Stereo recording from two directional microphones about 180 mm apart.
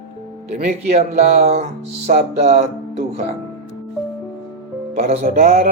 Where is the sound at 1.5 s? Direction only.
40° right (ahead or behind).